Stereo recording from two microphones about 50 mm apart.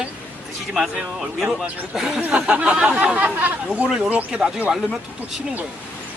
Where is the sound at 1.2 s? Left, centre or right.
Centre.